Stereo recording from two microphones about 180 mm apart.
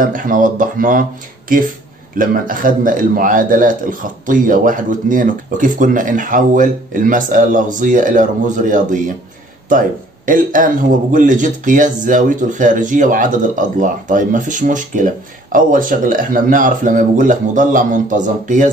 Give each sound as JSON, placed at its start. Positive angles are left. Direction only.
{"t": 0.0, "sound": "speech", "side_deg": -50}